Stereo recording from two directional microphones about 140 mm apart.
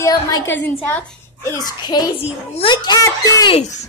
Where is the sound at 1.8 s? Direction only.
30° left (ahead or behind).